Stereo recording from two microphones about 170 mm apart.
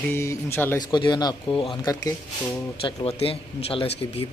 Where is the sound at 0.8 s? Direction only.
25° left (ahead or behind).